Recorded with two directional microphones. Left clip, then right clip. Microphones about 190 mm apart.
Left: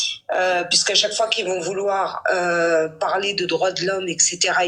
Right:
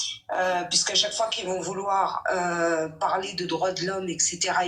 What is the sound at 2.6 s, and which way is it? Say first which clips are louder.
Speech: left 6 dB; 45° left (ahead or behind).